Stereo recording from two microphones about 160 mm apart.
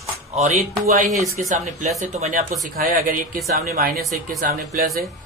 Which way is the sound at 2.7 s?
60° right (ahead or behind).